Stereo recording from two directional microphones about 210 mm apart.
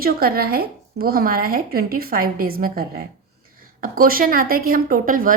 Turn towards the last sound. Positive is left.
turn(degrees=-40)  # may be behind; listen again after turning